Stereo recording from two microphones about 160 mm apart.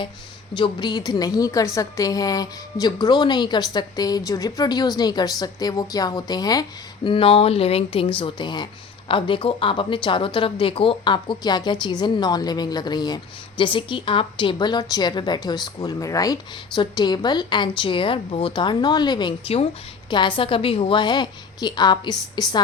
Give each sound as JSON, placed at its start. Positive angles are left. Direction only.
{"t": 0.5, "sound": "speech", "side_deg": 30}